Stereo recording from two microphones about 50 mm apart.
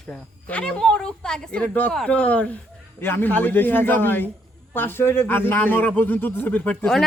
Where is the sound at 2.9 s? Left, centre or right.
Left.